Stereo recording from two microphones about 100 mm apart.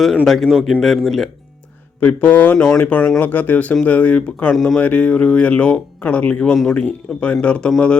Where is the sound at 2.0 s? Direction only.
15° left (ahead or behind).